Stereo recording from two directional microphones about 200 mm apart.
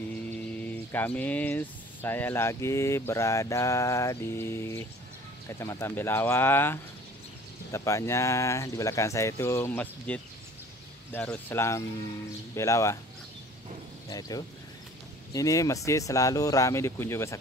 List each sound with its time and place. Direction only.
0.1 s speech: 10° left (ahead or behind)
14.0 s speech: 20° left (ahead or behind)